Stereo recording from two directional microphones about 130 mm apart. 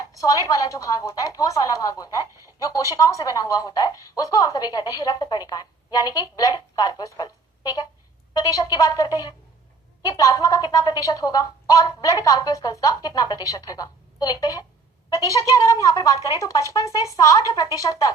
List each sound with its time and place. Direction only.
0.2 s speech: 25° left (ahead or behind)
8.3 s a woman's voice: 30° left (ahead or behind)